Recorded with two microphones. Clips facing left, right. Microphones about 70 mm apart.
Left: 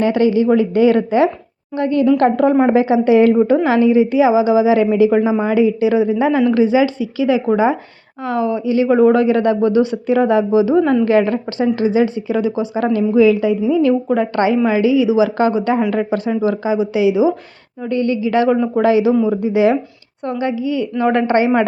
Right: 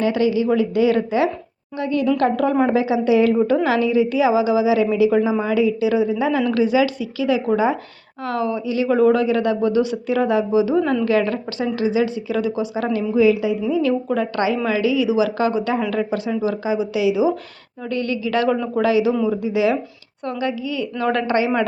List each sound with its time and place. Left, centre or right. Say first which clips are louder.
0.0 s a man's voice: left 4 dB; left
3.3 s a woman's voice: left 4 dB; left
12.8 s a man's voice: left 4 dB; left
18.5 s a man's voice: left 6 dB; centre
18.8 s a man's voice: left 4 dB; left